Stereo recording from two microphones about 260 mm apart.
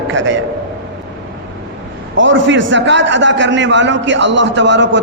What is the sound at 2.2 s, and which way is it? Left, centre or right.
A man's voice, right.